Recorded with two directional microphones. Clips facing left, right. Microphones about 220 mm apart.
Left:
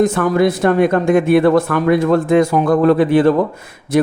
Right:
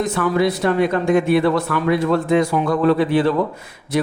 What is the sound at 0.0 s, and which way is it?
Speech, 50° left (ahead or behind).